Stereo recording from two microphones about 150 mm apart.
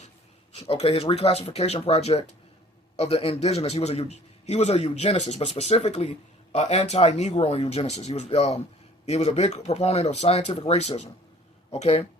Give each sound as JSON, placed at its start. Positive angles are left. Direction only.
{"t": 0.7, "sound": "a man's voice", "side_deg": 40}